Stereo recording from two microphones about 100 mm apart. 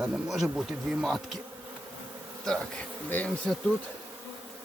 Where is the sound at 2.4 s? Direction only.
5° left (ahead or behind).